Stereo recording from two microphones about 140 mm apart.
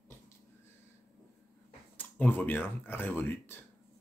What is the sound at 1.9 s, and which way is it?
Speech, 15° left (ahead or behind).